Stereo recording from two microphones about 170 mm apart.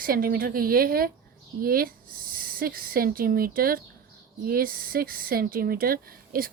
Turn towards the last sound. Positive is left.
turn(degrees=-60)  # may be behind; listen again after turning